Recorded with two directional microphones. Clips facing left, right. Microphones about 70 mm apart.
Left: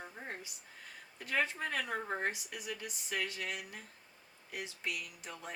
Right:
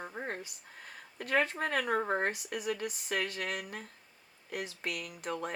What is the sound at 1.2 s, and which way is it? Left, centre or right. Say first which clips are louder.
Speech: right 5 dB; right.